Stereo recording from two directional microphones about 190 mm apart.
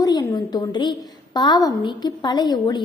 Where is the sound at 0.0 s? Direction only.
20° left (ahead or behind).